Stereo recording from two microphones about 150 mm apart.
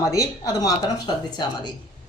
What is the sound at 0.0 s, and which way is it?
Speech, 25° left (ahead or behind).